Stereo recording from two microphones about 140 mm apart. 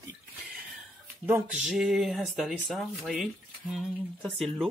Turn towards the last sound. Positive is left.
turn(degrees=0)  # may be behind; listen again after turning